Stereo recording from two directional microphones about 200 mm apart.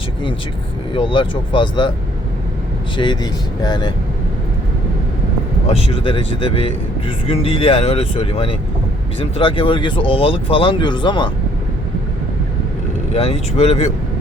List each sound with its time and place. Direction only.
0.9 s speech: 25° left (ahead or behind)
3.0 s speech: 20° left (ahead or behind)
5.6 s speech: 30° left (ahead or behind)
13.1 s speech: 30° left (ahead or behind)